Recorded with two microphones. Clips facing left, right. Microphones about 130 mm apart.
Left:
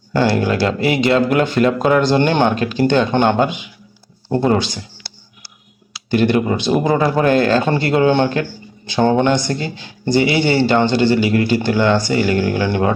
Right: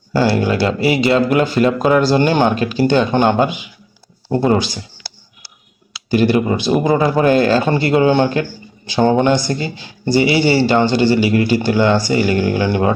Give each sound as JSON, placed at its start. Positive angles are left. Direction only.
{"t": 0.1, "sound": "speech", "side_deg": -5}
{"t": 6.1, "sound": "speech", "side_deg": -5}